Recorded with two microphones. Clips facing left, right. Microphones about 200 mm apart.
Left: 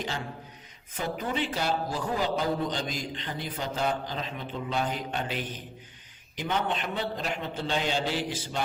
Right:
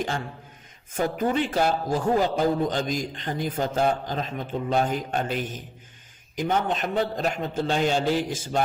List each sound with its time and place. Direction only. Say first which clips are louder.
0.9 s a man's voice: right 7 dB; 50° right (ahead or behind)